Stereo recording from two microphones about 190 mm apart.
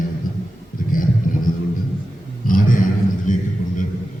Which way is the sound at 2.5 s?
45° left (ahead or behind).